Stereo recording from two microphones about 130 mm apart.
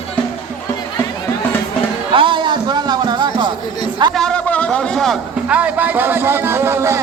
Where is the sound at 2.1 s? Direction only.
40° right (ahead or behind).